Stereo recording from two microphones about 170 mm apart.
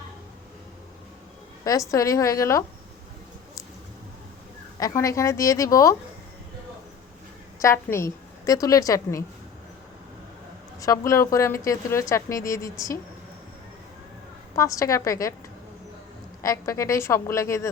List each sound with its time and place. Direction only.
1.6 s a woman's voice: 20° left (ahead or behind)
4.8 s a woman's voice: 20° left (ahead or behind)
7.6 s a woman's voice: 15° left (ahead or behind)
10.8 s a woman's voice: 20° left (ahead or behind)
14.5 s a woman's voice: 20° left (ahead or behind)
16.4 s a woman's voice: 20° left (ahead or behind)